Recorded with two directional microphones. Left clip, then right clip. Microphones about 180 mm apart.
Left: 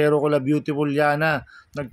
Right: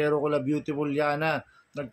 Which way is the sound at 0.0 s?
45° left (ahead or behind).